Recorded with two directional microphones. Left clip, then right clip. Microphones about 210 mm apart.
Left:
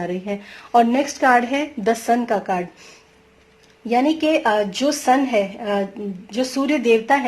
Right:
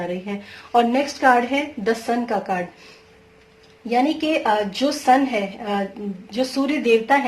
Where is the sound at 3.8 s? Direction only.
45° left (ahead or behind).